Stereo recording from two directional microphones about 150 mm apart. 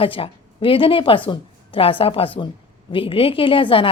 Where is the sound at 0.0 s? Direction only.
35° left (ahead or behind).